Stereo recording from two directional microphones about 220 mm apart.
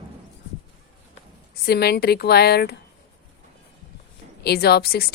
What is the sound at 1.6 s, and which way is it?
Speech, 45° left (ahead or behind).